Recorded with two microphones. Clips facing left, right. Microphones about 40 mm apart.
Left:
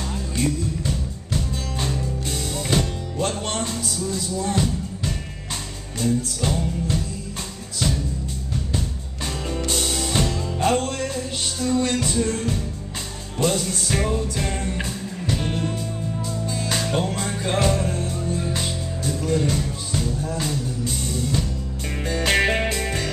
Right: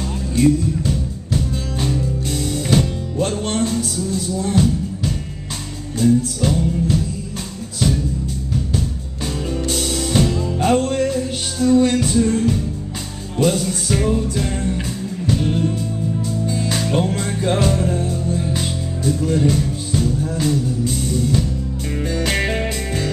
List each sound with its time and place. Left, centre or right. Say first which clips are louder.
0.4 s music: right 9 dB; centre
8.7 s music: right 5 dB; centre
16.3 s music: right 4 dB; centre